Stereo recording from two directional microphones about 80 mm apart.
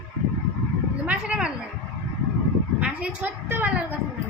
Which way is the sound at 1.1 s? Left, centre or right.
Centre.